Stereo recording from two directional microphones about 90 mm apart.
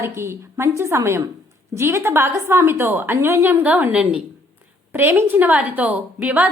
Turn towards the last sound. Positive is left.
turn(degrees=-15)  # may be behind; listen again after turning